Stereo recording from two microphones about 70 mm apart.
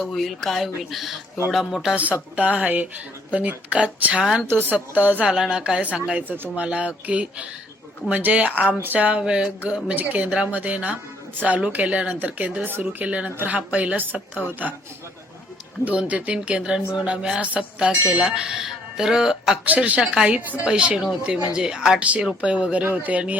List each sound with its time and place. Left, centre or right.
0.0 s speech: centre
2.3 s a woman's voice: centre
4.2 s a woman's voice: centre
4.7 s speech: right
5.2 s a woman's voice: centre
15.8 s a woman's voice: centre
19.6 s a woman's voice: right